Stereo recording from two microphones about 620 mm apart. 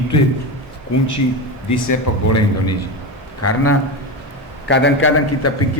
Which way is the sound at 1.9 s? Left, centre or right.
Left.